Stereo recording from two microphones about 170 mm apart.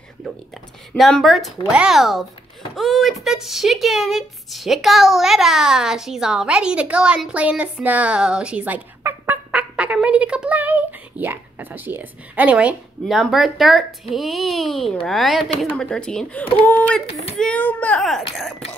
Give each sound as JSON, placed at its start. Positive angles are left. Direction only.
{"t": 0.9, "sound": "a woman's voice", "side_deg": 0}
{"t": 17.1, "sound": "speech", "side_deg": 35}
{"t": 17.4, "sound": "speech", "side_deg": 5}